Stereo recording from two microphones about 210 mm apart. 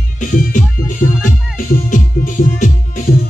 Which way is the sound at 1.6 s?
40° left (ahead or behind).